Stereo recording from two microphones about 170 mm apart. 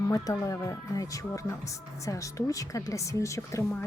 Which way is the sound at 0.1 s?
20° left (ahead or behind).